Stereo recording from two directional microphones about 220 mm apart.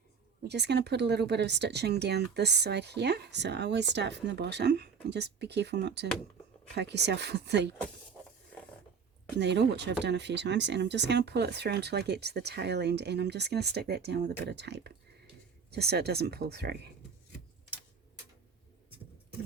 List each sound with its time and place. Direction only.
0.4 s speech: 50° right (ahead or behind)
9.4 s speech: 50° right (ahead or behind)